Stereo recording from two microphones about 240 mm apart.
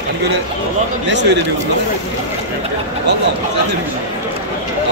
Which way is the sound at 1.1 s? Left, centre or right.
Right.